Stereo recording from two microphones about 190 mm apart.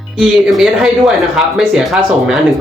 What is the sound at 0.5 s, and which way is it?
Speech, centre (ahead or behind).